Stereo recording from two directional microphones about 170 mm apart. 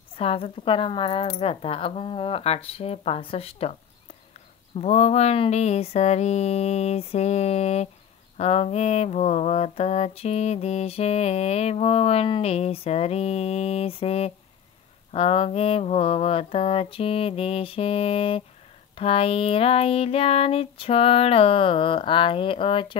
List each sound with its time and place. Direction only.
0.1 s mantra: 35° left (ahead or behind)
4.7 s mantra: 40° left (ahead or behind)